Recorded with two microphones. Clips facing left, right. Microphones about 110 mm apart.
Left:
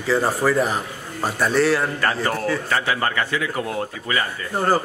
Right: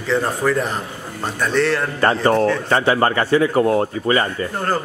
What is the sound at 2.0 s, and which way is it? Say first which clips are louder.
A man's voice: right 7 dB; 30° right (ahead or behind).